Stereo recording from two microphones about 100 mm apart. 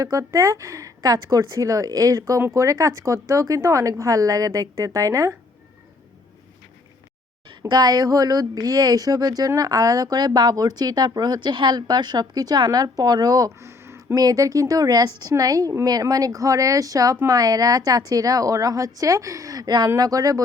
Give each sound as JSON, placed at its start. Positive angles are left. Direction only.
{"t": 0.0, "sound": "speech", "side_deg": -35}
{"t": 7.7, "sound": "speech", "side_deg": -40}
{"t": 13.6, "sound": "a sound", "side_deg": -25}
{"t": 14.2, "sound": "speech", "side_deg": -35}